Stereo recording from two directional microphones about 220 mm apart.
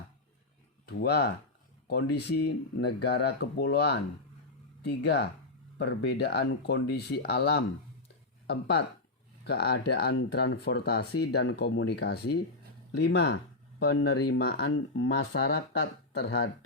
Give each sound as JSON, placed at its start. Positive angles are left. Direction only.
{"t": 0.9, "sound": "speech", "side_deg": 50}
{"t": 14.6, "sound": "speech", "side_deg": 65}
{"t": 15.2, "sound": "speech", "side_deg": 45}